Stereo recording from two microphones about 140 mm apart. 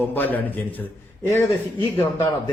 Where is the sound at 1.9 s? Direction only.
20° left (ahead or behind).